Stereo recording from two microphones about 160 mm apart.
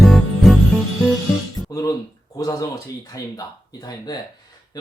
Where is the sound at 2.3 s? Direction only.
20° left (ahead or behind).